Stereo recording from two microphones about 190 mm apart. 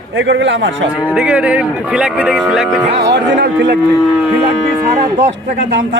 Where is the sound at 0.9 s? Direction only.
5° right (ahead or behind).